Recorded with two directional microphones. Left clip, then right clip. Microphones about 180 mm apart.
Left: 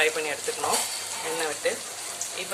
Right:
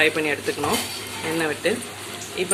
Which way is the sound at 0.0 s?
Centre (ahead or behind).